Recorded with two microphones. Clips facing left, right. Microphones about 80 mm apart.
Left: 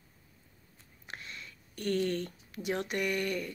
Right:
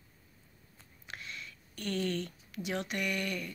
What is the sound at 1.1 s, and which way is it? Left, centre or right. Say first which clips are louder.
Speech: even; left.